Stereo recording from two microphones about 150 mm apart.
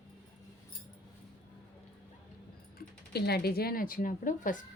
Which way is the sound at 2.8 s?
90° left.